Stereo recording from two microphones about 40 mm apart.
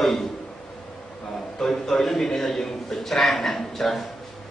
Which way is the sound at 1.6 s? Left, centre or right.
Centre.